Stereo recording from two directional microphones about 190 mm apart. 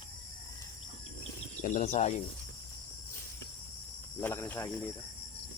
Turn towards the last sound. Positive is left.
turn(degrees=10)  # may be behind; listen again after turning